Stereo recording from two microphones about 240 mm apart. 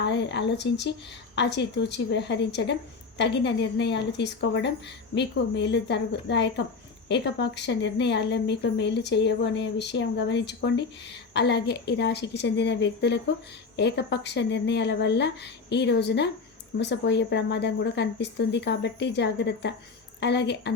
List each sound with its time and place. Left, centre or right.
0.0 s a woman's voice: left